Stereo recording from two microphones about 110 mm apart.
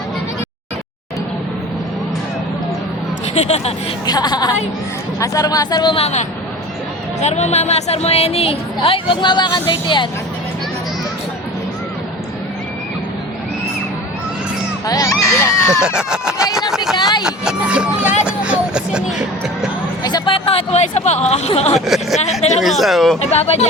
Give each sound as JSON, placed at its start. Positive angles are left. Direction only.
{"t": 3.3, "sound": "a woman's voice", "side_deg": 75}
{"t": 4.0, "sound": "speech", "side_deg": 40}
{"t": 5.9, "sound": "a woman's voice", "side_deg": 75}
{"t": 7.2, "sound": "a woman's voice", "side_deg": 90}
{"t": 14.8, "sound": "speech", "side_deg": 30}
{"t": 16.0, "sound": "a sound", "side_deg": -5}
{"t": 17.0, "sound": "a sound", "side_deg": 40}
{"t": 17.2, "sound": "vehicle", "side_deg": -10}
{"t": 20.1, "sound": "speech", "side_deg": 45}
{"t": 21.8, "sound": "speech", "side_deg": 0}
{"t": 22.2, "sound": "speech", "side_deg": 90}
{"t": 22.6, "sound": "speech", "side_deg": 0}
{"t": 23.2, "sound": "speech", "side_deg": 80}